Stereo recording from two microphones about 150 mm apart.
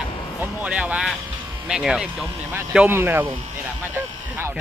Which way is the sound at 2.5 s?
15° right (ahead or behind).